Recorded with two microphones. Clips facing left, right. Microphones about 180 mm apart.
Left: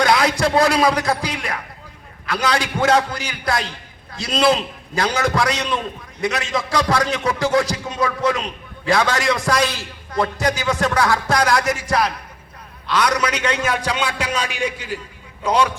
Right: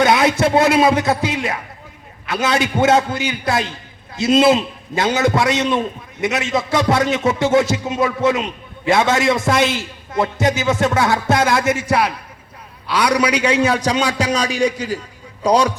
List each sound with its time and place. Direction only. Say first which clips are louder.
0.0 s a man's voice: right 3 dB; 25° right (ahead or behind)
13.3 s a man's voice: right 5 dB; 30° right (ahead or behind)